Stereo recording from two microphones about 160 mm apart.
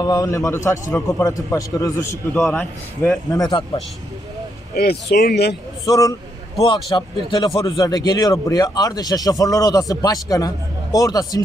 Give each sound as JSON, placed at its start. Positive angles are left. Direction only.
{"t": 0.0, "sound": "a man's voice", "side_deg": 25}
{"t": 2.4, "sound": "a man's voice", "side_deg": 5}
{"t": 3.3, "sound": "a man's voice", "side_deg": 25}
{"t": 4.7, "sound": "speech", "side_deg": 85}
{"t": 5.9, "sound": "a man's voice", "side_deg": 20}